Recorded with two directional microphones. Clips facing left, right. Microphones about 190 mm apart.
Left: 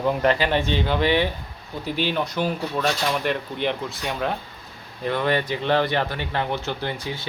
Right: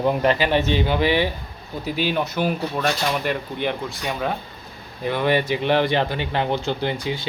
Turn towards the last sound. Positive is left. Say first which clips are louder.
# right 4 dB
turn(degrees=-15)  # may be behind; listen again after turning